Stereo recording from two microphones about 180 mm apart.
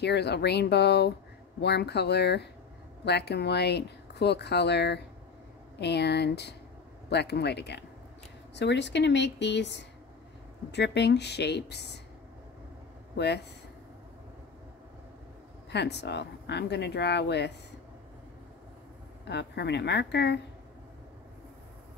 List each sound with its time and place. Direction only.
0.0 s speech: 70° left (ahead or behind)
13.1 s speech: 65° left (ahead or behind)
15.7 s speech: 70° left (ahead or behind)
19.2 s speech: 70° left (ahead or behind)